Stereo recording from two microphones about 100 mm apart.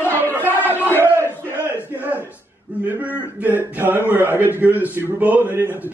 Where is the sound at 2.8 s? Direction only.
15° right (ahead or behind).